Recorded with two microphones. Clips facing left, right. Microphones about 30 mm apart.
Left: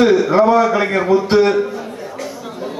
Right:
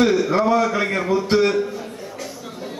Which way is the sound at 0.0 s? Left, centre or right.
Centre.